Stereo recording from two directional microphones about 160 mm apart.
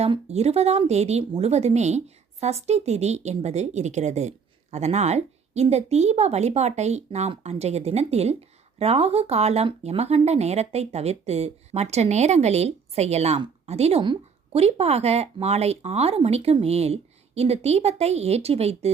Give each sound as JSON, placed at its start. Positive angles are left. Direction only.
{"t": 0.0, "sound": "speech", "side_deg": -40}